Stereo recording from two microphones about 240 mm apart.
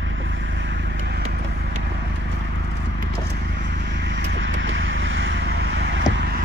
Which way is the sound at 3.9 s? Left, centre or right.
Right.